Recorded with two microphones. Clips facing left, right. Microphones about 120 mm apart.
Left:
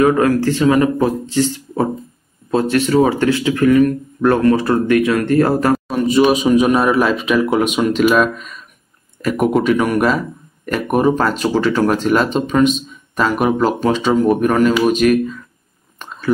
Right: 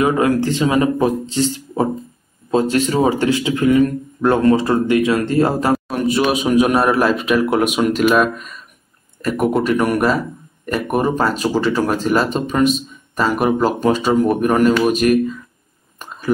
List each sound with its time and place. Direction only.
0.0 s speech: 20° right (ahead or behind)
2.9 s speech: 15° right (ahead or behind)
5.9 s a sound: centre (ahead or behind)
6.4 s speech: 5° right (ahead or behind)